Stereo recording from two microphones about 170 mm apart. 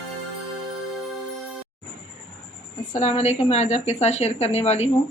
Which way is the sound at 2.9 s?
40° left (ahead or behind).